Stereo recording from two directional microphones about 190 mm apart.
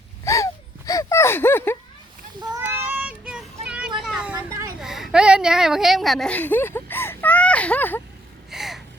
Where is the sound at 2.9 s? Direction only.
5° right (ahead or behind).